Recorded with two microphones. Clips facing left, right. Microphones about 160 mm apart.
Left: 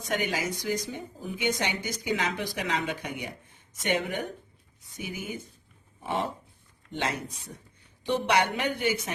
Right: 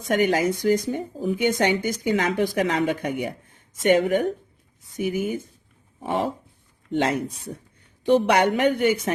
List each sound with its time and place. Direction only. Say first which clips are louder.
0.1 s speech: right 9 dB; 55° right (ahead or behind)
6.0 s a sound: right 5 dB; 50° right (ahead or behind)
6.9 s speech: right 9 dB; 55° right (ahead or behind)